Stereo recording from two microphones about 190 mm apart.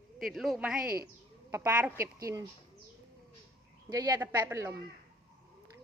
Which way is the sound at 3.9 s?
20° right (ahead or behind).